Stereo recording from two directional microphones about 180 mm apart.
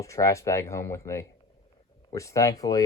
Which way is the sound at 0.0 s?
15° left (ahead or behind).